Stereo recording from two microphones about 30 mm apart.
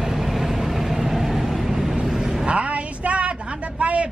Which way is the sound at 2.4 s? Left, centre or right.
Right.